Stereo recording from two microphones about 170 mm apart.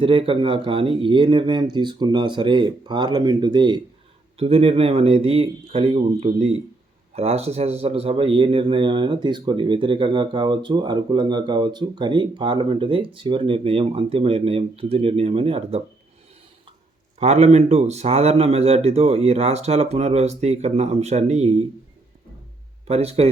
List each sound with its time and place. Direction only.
0.0 s a man's voice: 30° right (ahead or behind)
17.2 s a man's voice: 40° right (ahead or behind)
22.9 s a man's voice: 35° right (ahead or behind)